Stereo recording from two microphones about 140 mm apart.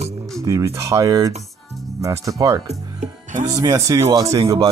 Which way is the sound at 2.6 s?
60° right (ahead or behind).